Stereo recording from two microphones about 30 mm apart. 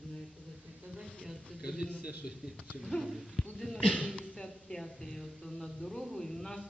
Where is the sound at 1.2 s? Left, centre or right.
Centre.